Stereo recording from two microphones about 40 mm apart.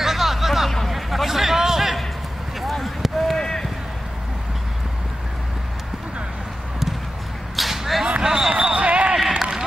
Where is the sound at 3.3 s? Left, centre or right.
Centre.